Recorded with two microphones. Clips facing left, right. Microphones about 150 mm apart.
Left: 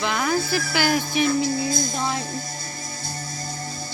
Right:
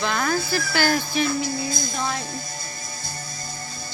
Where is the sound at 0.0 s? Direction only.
15° left (ahead or behind).